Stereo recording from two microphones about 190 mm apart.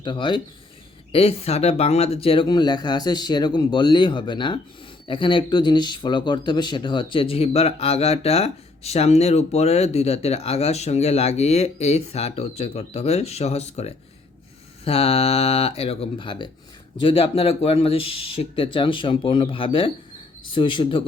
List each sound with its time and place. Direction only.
0.0 s speech: 25° left (ahead or behind)